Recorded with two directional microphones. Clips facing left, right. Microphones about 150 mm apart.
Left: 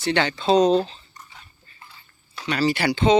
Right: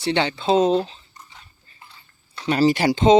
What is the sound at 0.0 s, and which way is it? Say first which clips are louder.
Speech: right 1 dB; 25° right (ahead or behind).